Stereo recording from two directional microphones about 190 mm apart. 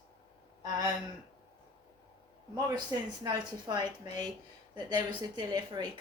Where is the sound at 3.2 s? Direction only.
20° right (ahead or behind).